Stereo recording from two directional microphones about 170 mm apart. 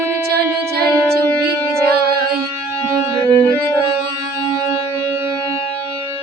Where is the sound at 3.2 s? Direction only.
25° right (ahead or behind).